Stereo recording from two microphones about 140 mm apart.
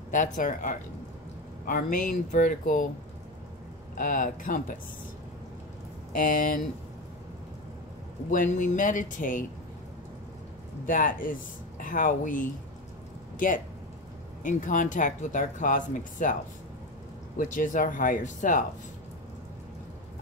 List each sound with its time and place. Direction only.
0.1 s speech: 70° left (ahead or behind)
4.0 s speech: 70° left (ahead or behind)
6.1 s speech: 80° left
8.3 s speech: 70° left (ahead or behind)
10.9 s speech: 75° left (ahead or behind)
14.4 s speech: 65° left (ahead or behind)
17.4 s speech: 70° left (ahead or behind)